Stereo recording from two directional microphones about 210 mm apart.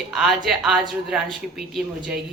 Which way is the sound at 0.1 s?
Centre (ahead or behind).